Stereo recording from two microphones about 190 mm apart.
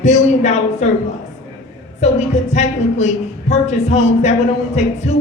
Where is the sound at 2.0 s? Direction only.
35° left (ahead or behind).